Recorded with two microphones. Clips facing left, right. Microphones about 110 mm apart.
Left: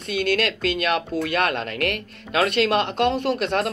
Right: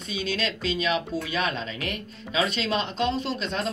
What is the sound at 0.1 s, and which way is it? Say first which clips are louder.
Speech: left 7 dB; 60° left (ahead or behind).